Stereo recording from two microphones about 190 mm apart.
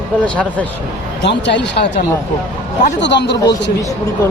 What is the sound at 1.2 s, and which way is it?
A man's voice, 65° left (ahead or behind).